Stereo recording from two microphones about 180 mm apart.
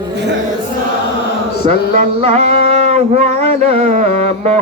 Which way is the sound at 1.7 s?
35° right (ahead or behind).